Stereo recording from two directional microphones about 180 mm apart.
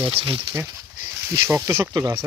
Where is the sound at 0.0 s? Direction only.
30° right (ahead or behind).